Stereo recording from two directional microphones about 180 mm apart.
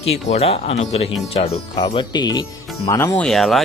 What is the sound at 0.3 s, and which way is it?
A man's voice, 35° left (ahead or behind).